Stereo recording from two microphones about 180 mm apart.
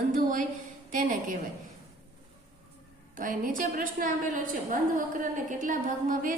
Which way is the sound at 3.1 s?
45° right (ahead or behind).